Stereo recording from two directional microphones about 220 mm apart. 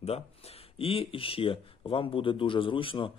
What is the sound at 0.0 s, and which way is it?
Speech, 25° left (ahead or behind).